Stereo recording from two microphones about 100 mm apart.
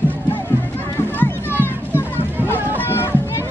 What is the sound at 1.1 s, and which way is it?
Music, 20° left (ahead or behind).